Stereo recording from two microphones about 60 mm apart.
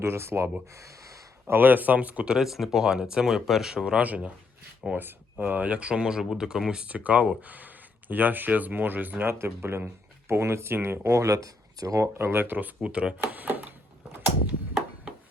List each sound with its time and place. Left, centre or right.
0.0 s speech: right
0.7 s gasp: right
1.5 s speech: right
2.3 s speech: centre
3.8 s speech: right
11.3 s speech: right
11.9 s speech: right
12.8 s speech: centre
13.2 s a sound: right